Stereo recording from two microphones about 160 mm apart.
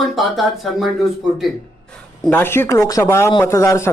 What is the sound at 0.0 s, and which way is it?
Speech, centre (ahead or behind).